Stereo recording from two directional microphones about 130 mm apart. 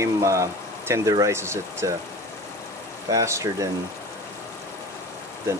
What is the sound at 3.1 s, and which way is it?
Speech, 25° right (ahead or behind).